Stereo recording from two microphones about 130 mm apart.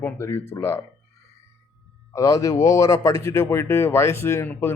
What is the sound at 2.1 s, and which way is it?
Speech, 25° left (ahead or behind).